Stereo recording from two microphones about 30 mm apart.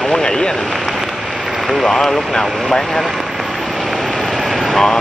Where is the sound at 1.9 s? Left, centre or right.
Centre.